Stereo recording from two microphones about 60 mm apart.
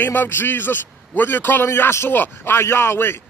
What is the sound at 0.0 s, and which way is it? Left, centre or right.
A man's voice, left.